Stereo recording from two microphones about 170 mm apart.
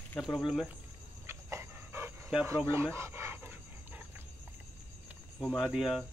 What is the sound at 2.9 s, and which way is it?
Dog, 15° right (ahead or behind).